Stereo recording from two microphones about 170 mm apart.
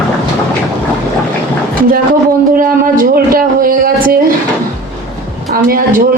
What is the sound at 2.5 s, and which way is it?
A man's voice, 55° right (ahead or behind).